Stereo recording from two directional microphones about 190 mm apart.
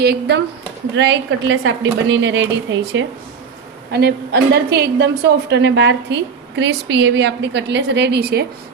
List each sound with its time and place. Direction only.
0.0 s a woman's voice: 60° right (ahead or behind)
0.9 s a woman's voice: 70° right (ahead or behind)
3.9 s a woman's voice: 60° right (ahead or behind)